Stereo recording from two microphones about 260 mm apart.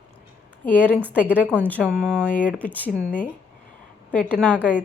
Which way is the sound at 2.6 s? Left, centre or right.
Centre.